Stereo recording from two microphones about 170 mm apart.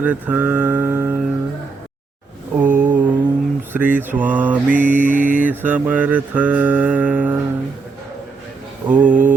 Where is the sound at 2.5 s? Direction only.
10° right (ahead or behind).